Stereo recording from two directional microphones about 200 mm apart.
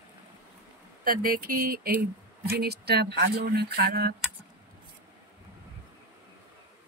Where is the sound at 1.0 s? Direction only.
45° right (ahead or behind).